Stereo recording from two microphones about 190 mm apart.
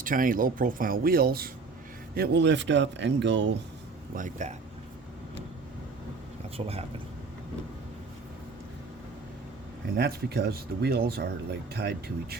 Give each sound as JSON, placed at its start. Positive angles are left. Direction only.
{"t": 0.0, "sound": "speech", "side_deg": -45}
{"t": 4.1, "sound": "speech", "side_deg": -40}
{"t": 6.6, "sound": "speech", "side_deg": -30}
{"t": 9.9, "sound": "speech", "side_deg": -55}